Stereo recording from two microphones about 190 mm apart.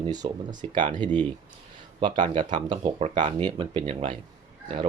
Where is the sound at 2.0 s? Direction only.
25° right (ahead or behind).